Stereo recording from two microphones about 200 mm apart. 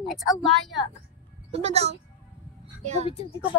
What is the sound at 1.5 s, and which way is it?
Speech, 30° right (ahead or behind).